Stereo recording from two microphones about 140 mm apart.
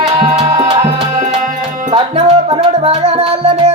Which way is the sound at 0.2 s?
45° right (ahead or behind).